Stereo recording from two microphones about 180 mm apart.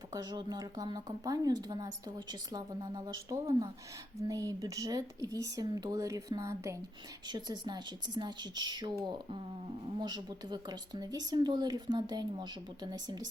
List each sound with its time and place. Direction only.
0.1 s speech: 25° right (ahead or behind)